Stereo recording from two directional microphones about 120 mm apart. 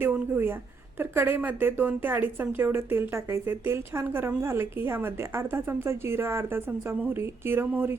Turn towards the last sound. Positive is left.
turn(degrees=-15)  # may be behind; listen again after turning